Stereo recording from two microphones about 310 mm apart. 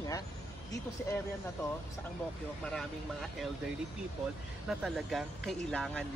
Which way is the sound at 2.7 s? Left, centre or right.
Centre.